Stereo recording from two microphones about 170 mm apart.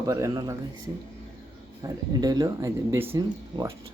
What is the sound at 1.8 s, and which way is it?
Speech, 20° right (ahead or behind).